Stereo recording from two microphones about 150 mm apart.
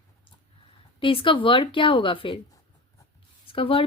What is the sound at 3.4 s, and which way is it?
Speech, 35° left (ahead or behind).